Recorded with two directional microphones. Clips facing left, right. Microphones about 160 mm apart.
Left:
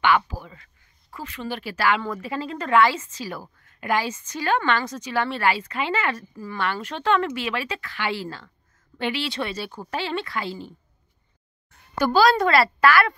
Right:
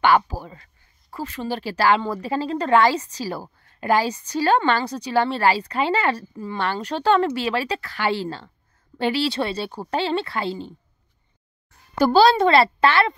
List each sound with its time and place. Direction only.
0.0 s a woman's voice: 35° right (ahead or behind)
12.0 s a child's voice: 30° right (ahead or behind)